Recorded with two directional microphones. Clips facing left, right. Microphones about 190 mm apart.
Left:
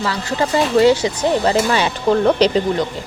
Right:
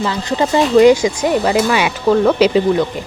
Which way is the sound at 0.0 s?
20° right (ahead or behind).